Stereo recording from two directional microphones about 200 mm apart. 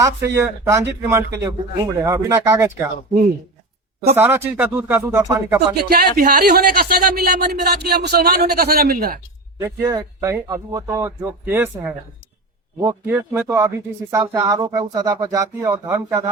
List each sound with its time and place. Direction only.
0.0 s speech: 10° right (ahead or behind)
4.1 s speech: 10° right (ahead or behind)
6.1 s speech: 45° right (ahead or behind)
9.6 s speech: 10° right (ahead or behind)